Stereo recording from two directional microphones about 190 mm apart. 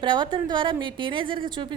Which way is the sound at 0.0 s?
25° right (ahead or behind).